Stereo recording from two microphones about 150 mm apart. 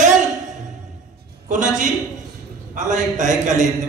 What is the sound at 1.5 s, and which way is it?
A man's voice, 55° right (ahead or behind).